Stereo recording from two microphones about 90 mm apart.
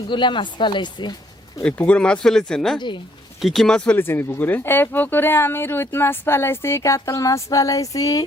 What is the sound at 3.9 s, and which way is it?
Speech, 25° left (ahead or behind).